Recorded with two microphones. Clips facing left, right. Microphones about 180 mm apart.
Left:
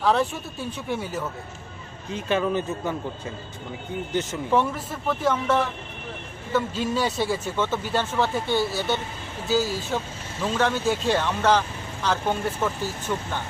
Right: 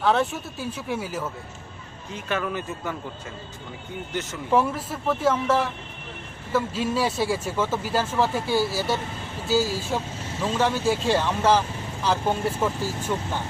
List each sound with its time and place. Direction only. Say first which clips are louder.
0.0 s speech: even; centre (ahead or behind)
2.1 s a man's voice: left 4 dB; 25° left (ahead or behind)
4.1 s a man's voice: left 4 dB; 20° left (ahead or behind)
4.5 s speech: right 1 dB; 5° right (ahead or behind)